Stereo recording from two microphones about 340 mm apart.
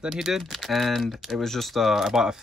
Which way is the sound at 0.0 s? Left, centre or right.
Centre.